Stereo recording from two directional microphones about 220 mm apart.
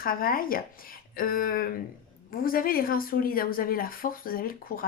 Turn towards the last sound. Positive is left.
turn(degrees=40)  # may be behind; listen again after turning